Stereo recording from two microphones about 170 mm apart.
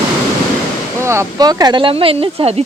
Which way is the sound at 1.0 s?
15° right (ahead or behind).